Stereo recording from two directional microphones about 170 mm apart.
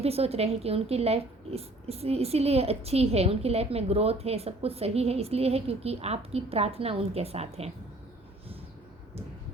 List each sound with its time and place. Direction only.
0.0 s a woman's voice: 35° right (ahead or behind)